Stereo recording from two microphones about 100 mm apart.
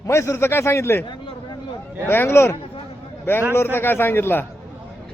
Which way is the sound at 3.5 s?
20° left (ahead or behind).